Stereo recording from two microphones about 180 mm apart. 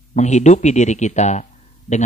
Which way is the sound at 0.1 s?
40° left (ahead or behind).